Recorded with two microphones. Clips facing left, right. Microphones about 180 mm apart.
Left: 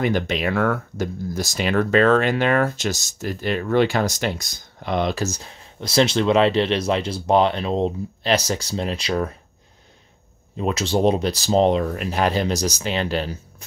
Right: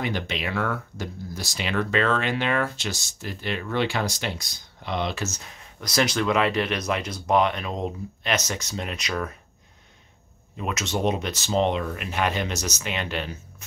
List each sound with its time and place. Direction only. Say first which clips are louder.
0.0 s speech: left 7 dB; 45° left (ahead or behind); by 9.3 s 30° left (ahead or behind)
10.6 s speech: left 6 dB; 30° left (ahead or behind)